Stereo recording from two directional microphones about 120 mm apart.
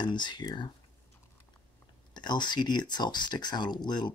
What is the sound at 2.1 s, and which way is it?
Speech, 40° left (ahead or behind).